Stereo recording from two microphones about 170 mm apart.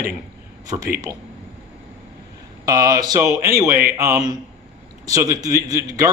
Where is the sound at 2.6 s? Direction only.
20° right (ahead or behind).